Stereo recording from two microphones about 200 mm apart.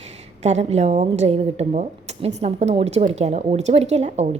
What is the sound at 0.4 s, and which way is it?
A woman's voice, 35° right (ahead or behind).